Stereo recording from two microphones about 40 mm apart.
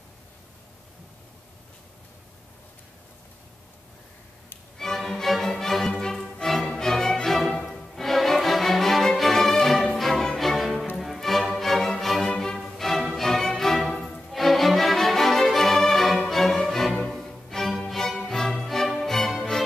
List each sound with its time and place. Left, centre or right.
4.7 s music: centre
6.4 s music: centre
16.9 s music: centre
17.2 s music: centre